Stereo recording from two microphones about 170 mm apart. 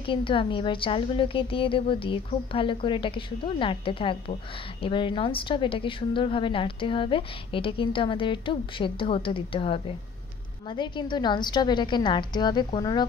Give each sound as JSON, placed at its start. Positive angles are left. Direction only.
{"t": 0.0, "sound": "a woman's voice", "side_deg": 30}